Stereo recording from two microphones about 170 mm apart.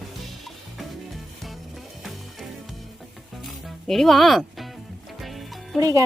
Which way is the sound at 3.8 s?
Centre (ahead or behind).